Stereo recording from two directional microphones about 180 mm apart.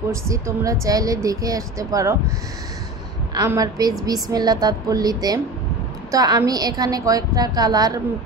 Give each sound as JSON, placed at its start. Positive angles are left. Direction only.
{"t": 0.1, "sound": "speech", "side_deg": -15}
{"t": 3.4, "sound": "a woman's voice", "side_deg": -20}